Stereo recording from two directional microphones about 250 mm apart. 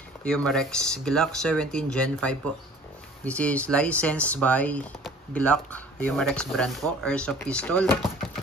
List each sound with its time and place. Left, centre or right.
0.2 s speech: centre